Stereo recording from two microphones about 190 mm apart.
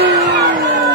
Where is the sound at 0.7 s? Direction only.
70° right (ahead or behind).